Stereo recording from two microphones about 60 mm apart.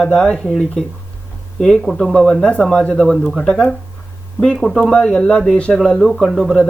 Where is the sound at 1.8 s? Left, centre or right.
Centre.